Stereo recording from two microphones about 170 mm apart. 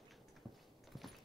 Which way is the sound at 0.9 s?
Centre (ahead or behind).